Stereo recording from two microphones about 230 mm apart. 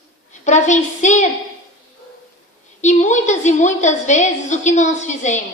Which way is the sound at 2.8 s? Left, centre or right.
Left.